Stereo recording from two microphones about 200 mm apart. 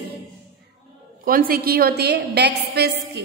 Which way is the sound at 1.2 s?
45° right (ahead or behind).